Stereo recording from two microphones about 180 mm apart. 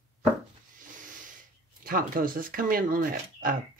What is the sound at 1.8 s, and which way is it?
Speech, 50° right (ahead or behind).